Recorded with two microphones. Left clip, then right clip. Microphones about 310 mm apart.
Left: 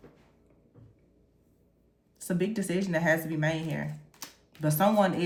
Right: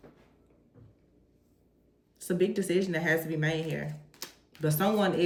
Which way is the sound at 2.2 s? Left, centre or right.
Centre.